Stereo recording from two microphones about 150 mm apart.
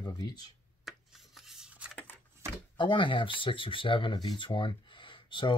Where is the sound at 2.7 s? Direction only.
35° left (ahead or behind).